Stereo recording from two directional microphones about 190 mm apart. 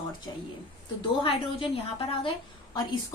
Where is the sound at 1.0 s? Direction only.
30° left (ahead or behind).